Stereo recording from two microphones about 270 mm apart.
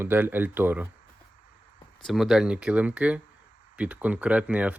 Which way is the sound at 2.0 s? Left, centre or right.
Centre.